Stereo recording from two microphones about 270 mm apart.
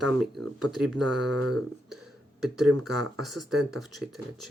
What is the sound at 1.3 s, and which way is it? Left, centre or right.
Speech, right.